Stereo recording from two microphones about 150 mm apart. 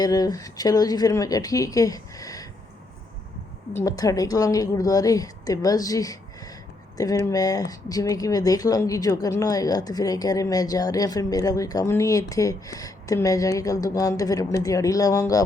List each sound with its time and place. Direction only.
0.0 s speech: 25° left (ahead or behind)
3.8 s speech: 25° left (ahead or behind)